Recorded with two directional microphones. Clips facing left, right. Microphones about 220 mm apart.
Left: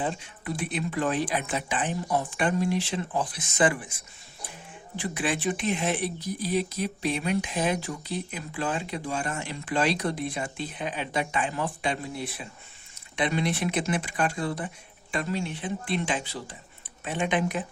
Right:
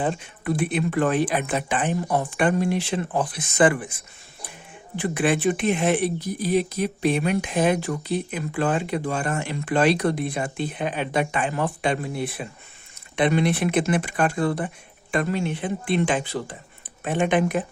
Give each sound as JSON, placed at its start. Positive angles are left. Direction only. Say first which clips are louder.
{"t": 0.0, "sound": "speech", "louder": "right 5 dB", "side_deg": -60}
{"t": 4.9, "sound": "speech", "louder": "right 7 dB", "side_deg": -60}